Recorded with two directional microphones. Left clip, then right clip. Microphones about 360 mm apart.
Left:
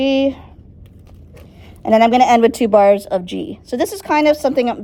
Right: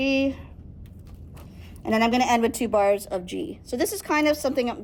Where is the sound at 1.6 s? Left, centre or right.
Left.